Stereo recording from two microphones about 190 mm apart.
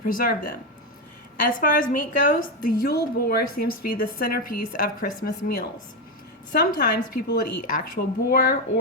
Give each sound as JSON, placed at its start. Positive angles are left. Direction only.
{"t": 0.0, "sound": "a woman's voice", "side_deg": 50}
{"t": 1.4, "sound": "a woman's voice", "side_deg": 45}
{"t": 6.5, "sound": "a woman's voice", "side_deg": 60}